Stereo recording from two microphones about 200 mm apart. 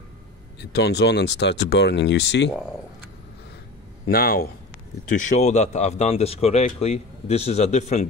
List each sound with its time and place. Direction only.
0.7 s speech: 60° left (ahead or behind)
4.1 s speech: 50° left (ahead or behind)